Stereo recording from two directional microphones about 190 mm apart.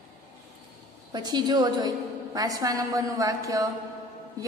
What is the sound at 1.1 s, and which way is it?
A woman's voice, 20° right (ahead or behind).